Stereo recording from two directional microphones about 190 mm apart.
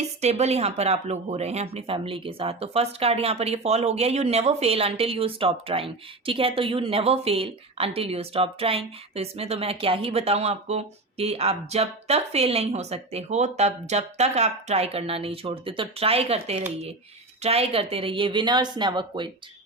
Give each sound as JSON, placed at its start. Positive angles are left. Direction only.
{"t": 0.2, "sound": "speech", "side_deg": -35}